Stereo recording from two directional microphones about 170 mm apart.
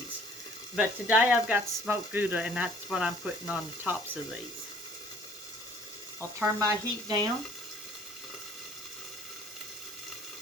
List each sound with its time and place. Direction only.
0.8 s speech: 10° right (ahead or behind)
6.1 s speech: 15° right (ahead or behind)